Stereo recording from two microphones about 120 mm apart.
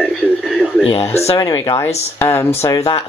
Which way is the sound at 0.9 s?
60° left (ahead or behind).